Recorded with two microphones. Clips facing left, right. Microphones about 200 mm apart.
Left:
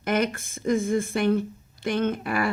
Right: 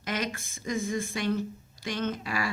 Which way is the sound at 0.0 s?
55° left (ahead or behind).